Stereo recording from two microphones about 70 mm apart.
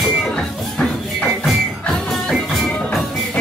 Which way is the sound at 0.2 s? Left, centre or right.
Centre.